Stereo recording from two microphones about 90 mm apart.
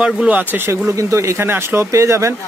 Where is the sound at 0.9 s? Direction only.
35° right (ahead or behind).